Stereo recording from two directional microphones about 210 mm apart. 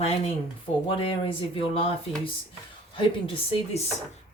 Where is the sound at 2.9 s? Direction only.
25° left (ahead or behind).